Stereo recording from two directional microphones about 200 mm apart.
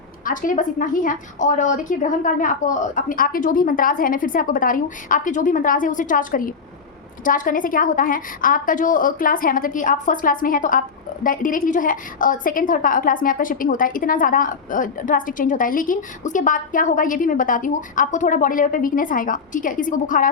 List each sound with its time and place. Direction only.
0.3 s a woman's voice: 40° left (ahead or behind)